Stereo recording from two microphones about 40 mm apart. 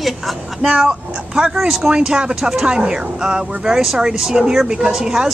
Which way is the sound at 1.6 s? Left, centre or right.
Centre.